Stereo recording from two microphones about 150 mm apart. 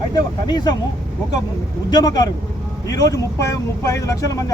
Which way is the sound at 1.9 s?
25° left (ahead or behind).